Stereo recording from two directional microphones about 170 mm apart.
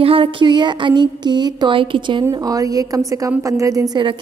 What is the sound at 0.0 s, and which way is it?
A woman's voice, 30° right (ahead or behind).